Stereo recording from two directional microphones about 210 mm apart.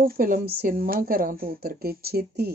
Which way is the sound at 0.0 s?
45° right (ahead or behind).